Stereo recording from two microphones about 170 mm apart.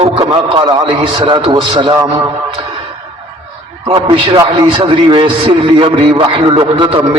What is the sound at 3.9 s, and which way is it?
A man's voice, 30° right (ahead or behind).